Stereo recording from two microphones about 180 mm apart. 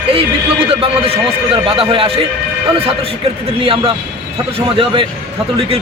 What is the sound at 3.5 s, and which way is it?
A man's voice, 30° right (ahead or behind).